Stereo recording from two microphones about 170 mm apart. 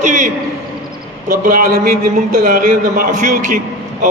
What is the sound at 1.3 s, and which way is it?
A man's voice, 55° right (ahead or behind).